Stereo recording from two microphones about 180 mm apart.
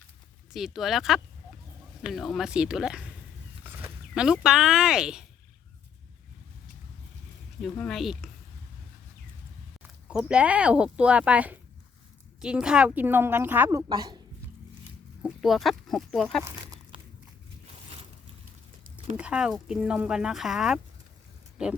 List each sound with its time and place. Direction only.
0.5 s speech: centre (ahead or behind)
7.6 s speech: centre (ahead or behind)
10.1 s speech: 5° right (ahead or behind); by 14.2 s 25° right (ahead or behind)
15.2 s speech: centre (ahead or behind)
19.1 s speech: 5° right (ahead or behind)